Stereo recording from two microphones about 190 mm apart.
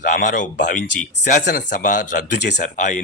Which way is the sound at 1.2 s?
50° left (ahead or behind).